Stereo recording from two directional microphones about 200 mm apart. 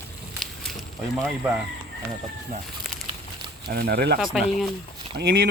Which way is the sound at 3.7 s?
50° right (ahead or behind).